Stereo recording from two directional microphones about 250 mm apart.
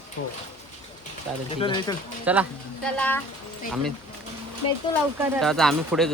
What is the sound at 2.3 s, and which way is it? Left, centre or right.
Speech, centre.